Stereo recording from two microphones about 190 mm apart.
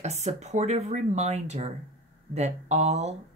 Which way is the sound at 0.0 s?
35° right (ahead or behind).